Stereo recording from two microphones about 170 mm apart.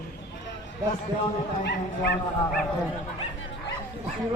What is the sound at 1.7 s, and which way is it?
Speech, 85° left.